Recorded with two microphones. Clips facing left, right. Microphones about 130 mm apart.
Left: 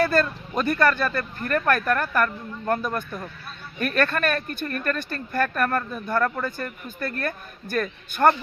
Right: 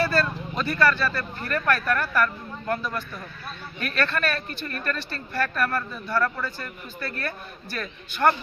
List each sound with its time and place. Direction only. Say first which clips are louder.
0.0 s speech: left 2 dB; 50° left (ahead or behind)